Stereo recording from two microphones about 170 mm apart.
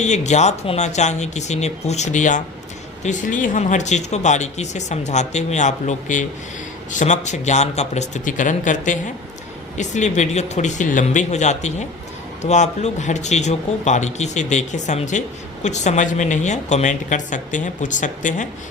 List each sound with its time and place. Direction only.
0.0 s speech: 45° left (ahead or behind)